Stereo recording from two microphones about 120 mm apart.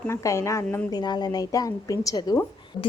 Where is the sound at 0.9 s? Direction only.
35° left (ahead or behind).